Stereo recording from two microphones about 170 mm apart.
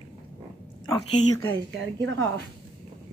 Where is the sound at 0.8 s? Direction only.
20° left (ahead or behind).